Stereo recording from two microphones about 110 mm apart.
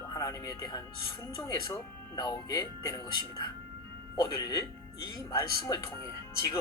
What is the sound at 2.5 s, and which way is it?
Speech, 35° left (ahead or behind).